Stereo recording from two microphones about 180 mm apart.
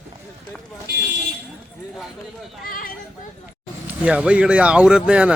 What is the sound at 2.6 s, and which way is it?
Speech, 50° left (ahead or behind).